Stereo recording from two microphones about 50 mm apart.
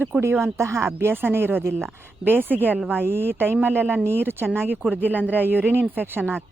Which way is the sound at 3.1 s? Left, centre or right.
Right.